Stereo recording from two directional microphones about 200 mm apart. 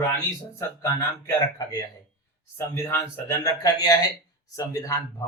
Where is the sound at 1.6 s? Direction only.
20° left (ahead or behind).